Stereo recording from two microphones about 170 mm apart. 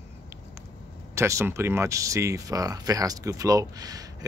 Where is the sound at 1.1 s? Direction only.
15° right (ahead or behind).